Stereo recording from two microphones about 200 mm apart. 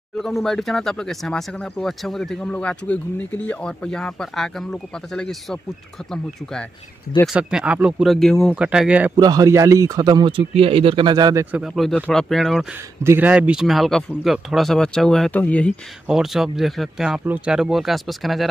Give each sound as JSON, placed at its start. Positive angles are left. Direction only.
{"t": 0.2, "sound": "speech", "side_deg": 0}
{"t": 9.1, "sound": "speech", "side_deg": -20}
{"t": 11.5, "sound": "speech", "side_deg": 0}
{"t": 13.0, "sound": "speech", "side_deg": -10}